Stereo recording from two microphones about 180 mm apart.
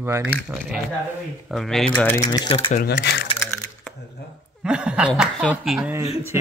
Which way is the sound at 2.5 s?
30° left (ahead or behind).